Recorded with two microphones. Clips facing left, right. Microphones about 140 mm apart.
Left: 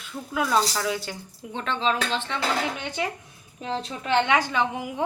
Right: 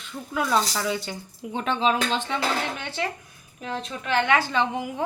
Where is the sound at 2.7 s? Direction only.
15° left (ahead or behind).